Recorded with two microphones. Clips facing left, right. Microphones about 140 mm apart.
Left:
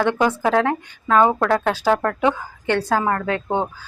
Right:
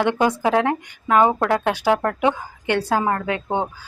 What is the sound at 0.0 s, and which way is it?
A woman's voice, 20° right (ahead or behind).